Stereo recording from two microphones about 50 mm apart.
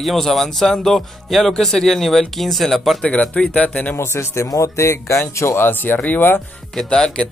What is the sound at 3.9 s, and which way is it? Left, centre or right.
Speech, left.